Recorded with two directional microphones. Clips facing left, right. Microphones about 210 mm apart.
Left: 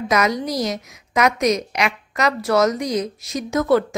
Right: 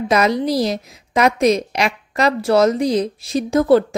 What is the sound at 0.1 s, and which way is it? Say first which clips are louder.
A woman's voice: right 4 dB; 30° right (ahead or behind).